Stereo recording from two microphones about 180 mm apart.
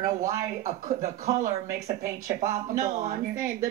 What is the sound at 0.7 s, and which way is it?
Speech, 40° right (ahead or behind).